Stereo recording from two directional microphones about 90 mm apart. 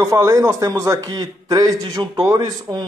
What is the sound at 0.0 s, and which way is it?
Speech, 40° right (ahead or behind).